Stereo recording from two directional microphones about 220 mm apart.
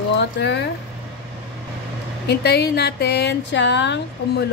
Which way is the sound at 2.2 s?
50° left (ahead or behind).